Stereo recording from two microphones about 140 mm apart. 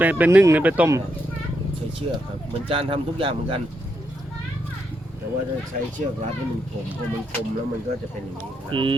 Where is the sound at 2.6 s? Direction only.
40° right (ahead or behind).